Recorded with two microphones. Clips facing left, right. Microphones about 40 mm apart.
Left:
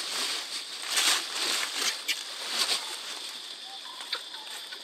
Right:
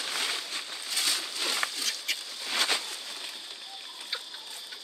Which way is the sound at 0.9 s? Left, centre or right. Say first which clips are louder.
Left 4 dB; left.